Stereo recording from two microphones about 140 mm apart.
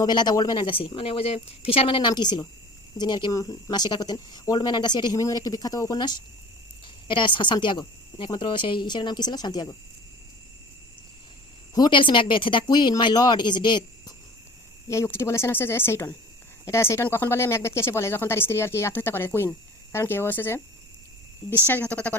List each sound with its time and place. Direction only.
0.0 s speech: 30° left (ahead or behind)
11.7 s speech: 30° left (ahead or behind)
14.8 s speech: 20° left (ahead or behind)